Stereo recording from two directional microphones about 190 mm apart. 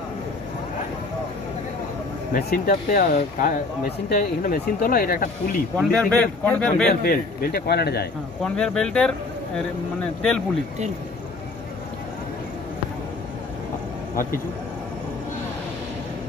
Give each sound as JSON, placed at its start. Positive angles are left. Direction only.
{"t": 2.3, "sound": "speech", "side_deg": 50}
{"t": 5.8, "sound": "speech", "side_deg": 5}
{"t": 6.9, "sound": "a man's voice", "side_deg": 50}
{"t": 8.4, "sound": "speech", "side_deg": 5}